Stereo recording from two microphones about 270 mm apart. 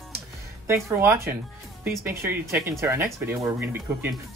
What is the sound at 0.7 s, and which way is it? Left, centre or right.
Speech, centre.